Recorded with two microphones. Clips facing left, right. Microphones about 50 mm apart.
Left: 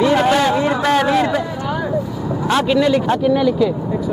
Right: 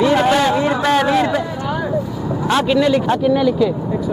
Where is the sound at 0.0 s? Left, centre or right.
Centre.